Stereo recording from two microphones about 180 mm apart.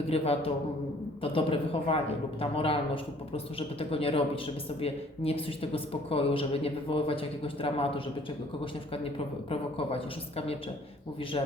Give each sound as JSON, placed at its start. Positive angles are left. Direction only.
{"t": 0.1, "sound": "a man's voice", "side_deg": 35}